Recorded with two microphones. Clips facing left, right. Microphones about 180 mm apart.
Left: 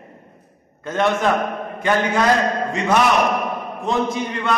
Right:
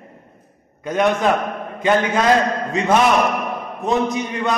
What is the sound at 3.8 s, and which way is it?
Speech, 20° right (ahead or behind).